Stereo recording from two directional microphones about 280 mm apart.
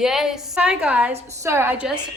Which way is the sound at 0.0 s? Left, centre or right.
Centre.